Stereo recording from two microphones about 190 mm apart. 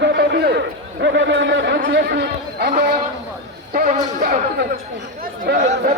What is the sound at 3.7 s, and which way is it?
Speech, 45° right (ahead or behind).